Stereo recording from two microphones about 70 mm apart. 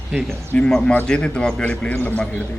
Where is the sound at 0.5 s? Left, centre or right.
Centre.